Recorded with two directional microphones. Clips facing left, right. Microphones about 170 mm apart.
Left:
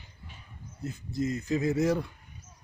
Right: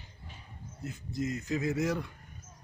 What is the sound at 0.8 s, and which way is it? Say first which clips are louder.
A man's voice: left 3 dB; 30° left (ahead or behind).